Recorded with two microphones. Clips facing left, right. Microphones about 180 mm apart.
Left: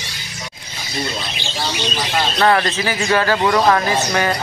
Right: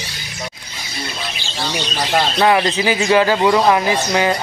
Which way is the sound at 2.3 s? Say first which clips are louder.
Even; 15° right (ahead or behind).